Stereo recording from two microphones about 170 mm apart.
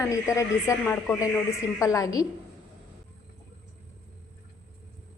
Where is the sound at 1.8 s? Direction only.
20° left (ahead or behind).